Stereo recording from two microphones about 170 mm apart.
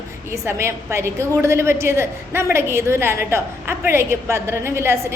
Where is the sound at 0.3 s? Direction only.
15° right (ahead or behind).